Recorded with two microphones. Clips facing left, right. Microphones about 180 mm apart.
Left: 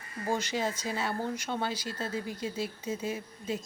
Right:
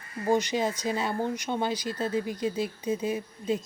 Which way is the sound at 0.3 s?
15° right (ahead or behind).